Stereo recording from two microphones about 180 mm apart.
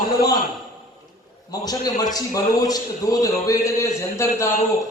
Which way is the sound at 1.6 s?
20° left (ahead or behind).